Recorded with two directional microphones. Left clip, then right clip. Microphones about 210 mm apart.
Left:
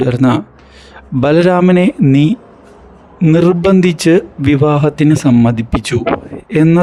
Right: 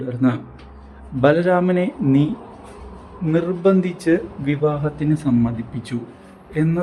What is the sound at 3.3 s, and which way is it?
A man's voice, 45° left (ahead or behind).